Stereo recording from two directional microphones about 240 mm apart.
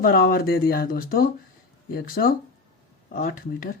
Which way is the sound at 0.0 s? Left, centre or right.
Left.